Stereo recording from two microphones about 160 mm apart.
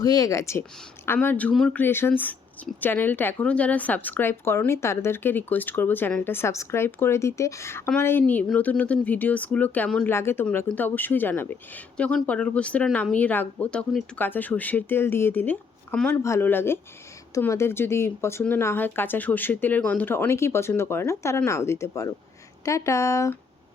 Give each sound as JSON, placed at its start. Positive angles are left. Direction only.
{"t": 0.0, "sound": "speech", "side_deg": 20}